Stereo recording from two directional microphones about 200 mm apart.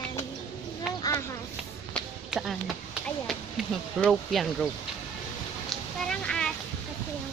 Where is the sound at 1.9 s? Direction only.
Centre (ahead or behind).